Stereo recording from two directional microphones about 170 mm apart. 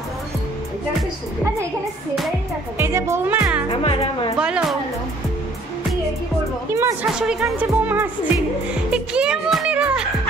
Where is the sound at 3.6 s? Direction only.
30° left (ahead or behind).